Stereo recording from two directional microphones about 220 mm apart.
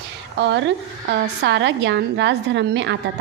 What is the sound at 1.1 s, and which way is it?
A woman's voice, 55° right (ahead or behind).